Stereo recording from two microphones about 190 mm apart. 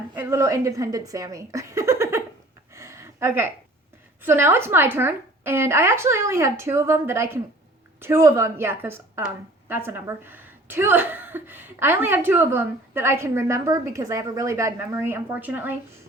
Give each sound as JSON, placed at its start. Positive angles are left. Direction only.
{"t": 0.1, "sound": "a woman's voice", "side_deg": -10}
{"t": 2.7, "sound": "a sound", "side_deg": -15}
{"t": 4.2, "sound": "a woman's voice", "side_deg": -10}